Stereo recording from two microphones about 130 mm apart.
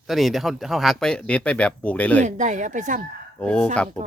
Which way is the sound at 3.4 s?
10° left (ahead or behind).